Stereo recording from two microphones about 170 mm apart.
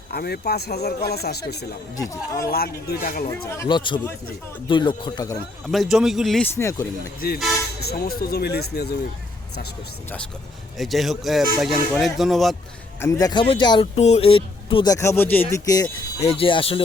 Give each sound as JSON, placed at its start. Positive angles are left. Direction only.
{"t": 0.1, "sound": "speech", "side_deg": 70}
{"t": 2.0, "sound": "speech", "side_deg": 20}
{"t": 2.5, "sound": "speech", "side_deg": 65}
{"t": 3.7, "sound": "speech", "side_deg": 30}
{"t": 5.6, "sound": "speech", "side_deg": 0}
{"t": 6.6, "sound": "speech", "side_deg": 15}
{"t": 7.2, "sound": "speech", "side_deg": 60}
{"t": 10.8, "sound": "speech", "side_deg": 0}
{"t": 13.0, "sound": "speech", "side_deg": 20}
{"t": 14.9, "sound": "speech", "side_deg": 15}
{"t": 16.2, "sound": "speech", "side_deg": 35}